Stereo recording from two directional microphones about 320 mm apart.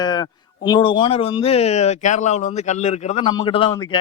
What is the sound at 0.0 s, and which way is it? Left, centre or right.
A man's voice, centre.